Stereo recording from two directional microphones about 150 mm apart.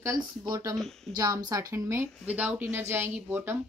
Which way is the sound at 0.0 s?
20° right (ahead or behind).